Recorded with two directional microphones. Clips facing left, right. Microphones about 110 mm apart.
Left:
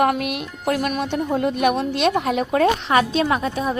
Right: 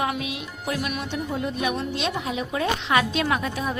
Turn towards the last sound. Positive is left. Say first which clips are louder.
# left 4 dB
turn(degrees=30)  # may be behind; listen again after turning